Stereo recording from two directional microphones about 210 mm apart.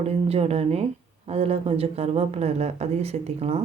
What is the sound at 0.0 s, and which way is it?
Speech, 30° right (ahead or behind).